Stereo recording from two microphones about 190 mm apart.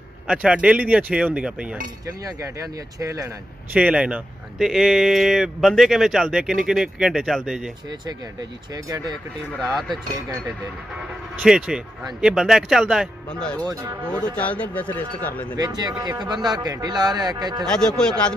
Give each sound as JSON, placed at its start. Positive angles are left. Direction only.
{"t": 0.3, "sound": "speech", "side_deg": -5}
{"t": 3.0, "sound": "speech", "side_deg": -15}
{"t": 3.7, "sound": "speech", "side_deg": -5}
{"t": 8.7, "sound": "speech", "side_deg": -15}
{"t": 9.5, "sound": "speech", "side_deg": 0}
{"t": 11.0, "sound": "speech", "side_deg": -5}
{"t": 13.7, "sound": "speech", "side_deg": -15}
{"t": 14.2, "sound": "speech", "side_deg": 5}
{"t": 15.5, "sound": "a man's voice", "side_deg": -20}
{"t": 17.6, "sound": "speech", "side_deg": 5}